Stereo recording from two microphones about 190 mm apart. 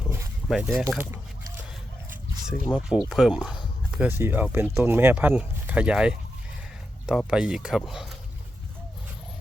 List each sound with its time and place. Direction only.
0.4 s speech: centre (ahead or behind)
2.5 s speech: 5° right (ahead or behind)
7.3 s speech: 5° right (ahead or behind)